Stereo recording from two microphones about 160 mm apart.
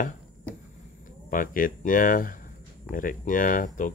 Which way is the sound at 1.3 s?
60° left (ahead or behind).